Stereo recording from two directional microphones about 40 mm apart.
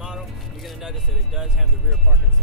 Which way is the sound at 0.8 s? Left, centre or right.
Centre.